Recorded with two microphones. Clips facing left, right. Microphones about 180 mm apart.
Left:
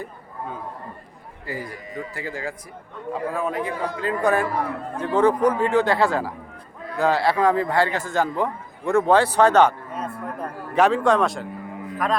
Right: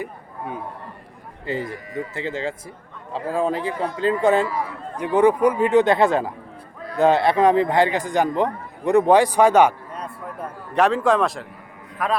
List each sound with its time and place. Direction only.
0.0 s a sound: 15° right (ahead or behind)
1.5 s a man's voice: 25° right (ahead or behind)
4.4 s speech: 55° left (ahead or behind)
4.9 s a man's voice: 15° right (ahead or behind)
9.9 s a man's voice: centre (ahead or behind)